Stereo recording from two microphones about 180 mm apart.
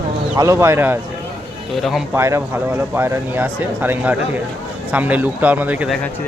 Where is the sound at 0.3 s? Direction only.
15° right (ahead or behind).